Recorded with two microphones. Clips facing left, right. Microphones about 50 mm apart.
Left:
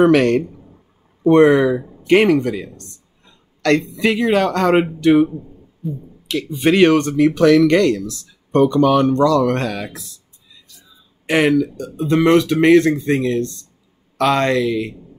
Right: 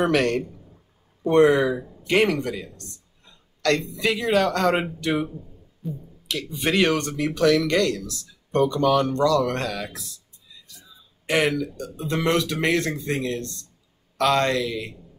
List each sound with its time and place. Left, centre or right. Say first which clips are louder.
0.0 s speech: left 8 dB; left
1.3 s speech: left 5 dB; left
1.7 s speech: left 8 dB; left
5.8 s speech: left 6 dB; centre
6.2 s speech: left 8 dB; left
11.2 s speech: left 7 dB; left